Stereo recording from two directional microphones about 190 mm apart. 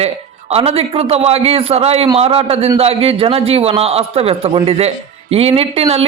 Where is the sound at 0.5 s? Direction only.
30° right (ahead or behind).